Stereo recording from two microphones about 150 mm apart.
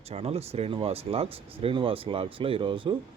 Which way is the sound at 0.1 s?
45° right (ahead or behind).